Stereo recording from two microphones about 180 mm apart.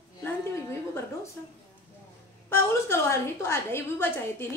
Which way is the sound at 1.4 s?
10° left (ahead or behind).